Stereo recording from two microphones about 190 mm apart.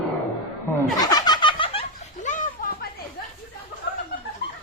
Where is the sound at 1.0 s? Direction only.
20° left (ahead or behind).